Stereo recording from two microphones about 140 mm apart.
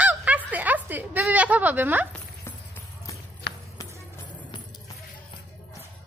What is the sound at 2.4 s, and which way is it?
Music, 20° left (ahead or behind).